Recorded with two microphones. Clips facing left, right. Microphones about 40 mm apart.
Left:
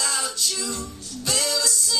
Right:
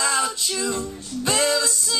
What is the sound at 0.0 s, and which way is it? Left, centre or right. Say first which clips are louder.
Music: right 4 dB; right.